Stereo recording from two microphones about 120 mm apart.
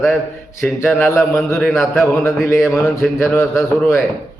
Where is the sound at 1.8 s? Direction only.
20° left (ahead or behind).